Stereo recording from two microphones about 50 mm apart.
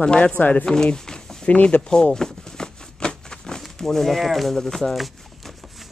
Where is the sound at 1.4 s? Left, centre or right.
Left.